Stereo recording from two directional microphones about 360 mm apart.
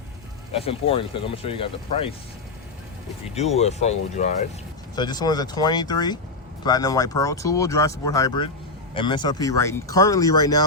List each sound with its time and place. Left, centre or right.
0.5 s speech: centre
3.3 s speech: centre